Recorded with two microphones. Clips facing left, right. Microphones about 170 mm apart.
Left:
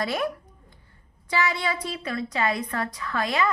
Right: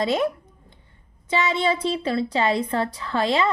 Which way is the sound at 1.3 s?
20° right (ahead or behind).